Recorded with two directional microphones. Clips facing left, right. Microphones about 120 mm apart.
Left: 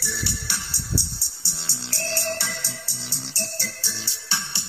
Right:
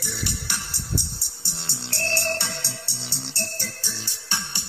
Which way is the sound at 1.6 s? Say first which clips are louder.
Right 1 dB; 60° right (ahead or behind).